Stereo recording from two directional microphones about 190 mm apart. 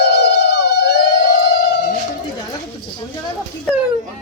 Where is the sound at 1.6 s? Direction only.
50° left (ahead or behind).